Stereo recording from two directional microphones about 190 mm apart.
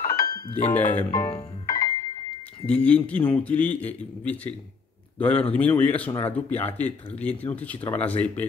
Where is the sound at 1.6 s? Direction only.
20° left (ahead or behind).